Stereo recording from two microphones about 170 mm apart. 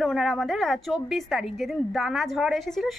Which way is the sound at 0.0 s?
Centre (ahead or behind).